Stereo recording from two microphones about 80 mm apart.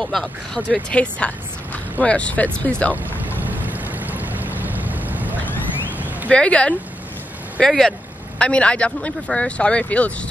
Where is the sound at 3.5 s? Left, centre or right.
Right.